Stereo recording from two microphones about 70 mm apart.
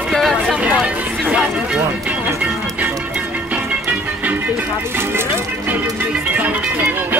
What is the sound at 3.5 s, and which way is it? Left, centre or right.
Music, right.